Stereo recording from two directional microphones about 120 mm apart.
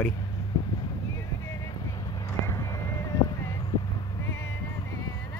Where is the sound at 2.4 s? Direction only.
25° left (ahead or behind).